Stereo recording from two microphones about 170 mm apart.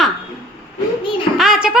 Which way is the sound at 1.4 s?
5° right (ahead or behind).